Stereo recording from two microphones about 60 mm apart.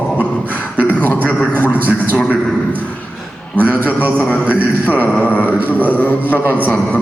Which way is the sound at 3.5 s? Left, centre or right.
Right.